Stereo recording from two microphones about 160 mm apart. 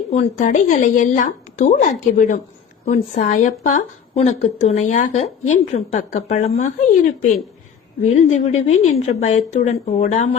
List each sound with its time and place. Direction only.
0.1 s a woman's voice: 50° left (ahead or behind)